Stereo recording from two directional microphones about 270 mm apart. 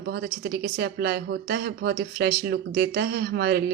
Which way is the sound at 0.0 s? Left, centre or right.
Right.